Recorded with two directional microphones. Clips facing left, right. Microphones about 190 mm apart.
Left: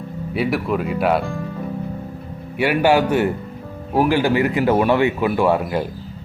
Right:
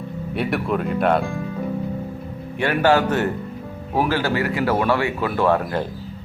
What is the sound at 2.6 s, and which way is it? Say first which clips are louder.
Speech: left 2 dB; 10° left (ahead or behind).